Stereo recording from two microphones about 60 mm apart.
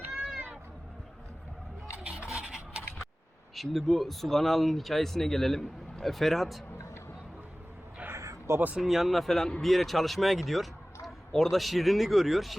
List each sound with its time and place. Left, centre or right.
2.0 s filing: centre
3.5 s speech: centre
8.1 s a sound: right
8.7 s speech: centre